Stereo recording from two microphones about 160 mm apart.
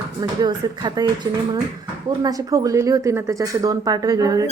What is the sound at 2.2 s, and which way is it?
Speech, 25° right (ahead or behind).